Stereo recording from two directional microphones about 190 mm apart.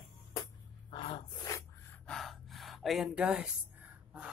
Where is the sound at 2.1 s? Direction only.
Centre (ahead or behind).